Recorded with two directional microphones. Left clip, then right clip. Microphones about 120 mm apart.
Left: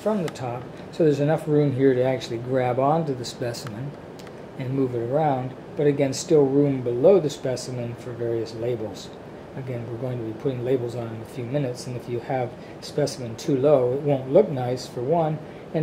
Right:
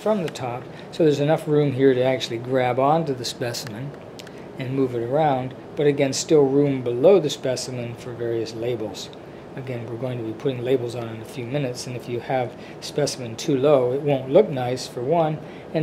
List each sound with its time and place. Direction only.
0.0 s speech: 5° right (ahead or behind)
10.0 s speech: 5° right (ahead or behind)